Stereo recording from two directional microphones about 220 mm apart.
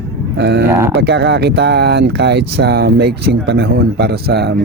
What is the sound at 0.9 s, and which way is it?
Speech, 50° right (ahead or behind).